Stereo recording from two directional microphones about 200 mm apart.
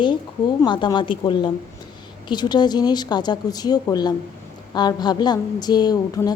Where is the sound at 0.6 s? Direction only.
20° left (ahead or behind).